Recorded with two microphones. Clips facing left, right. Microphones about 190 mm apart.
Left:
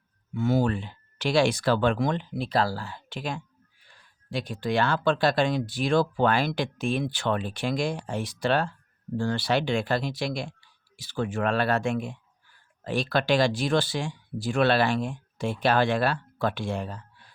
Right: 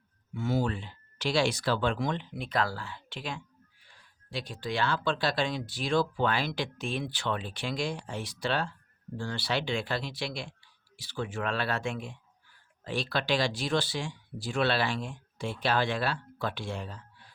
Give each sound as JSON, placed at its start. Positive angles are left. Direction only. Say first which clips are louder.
{"t": 0.3, "sound": "speech", "louder": "left 5 dB", "side_deg": 55}
{"t": 2.3, "sound": "speech", "louder": "left 5 dB", "side_deg": 35}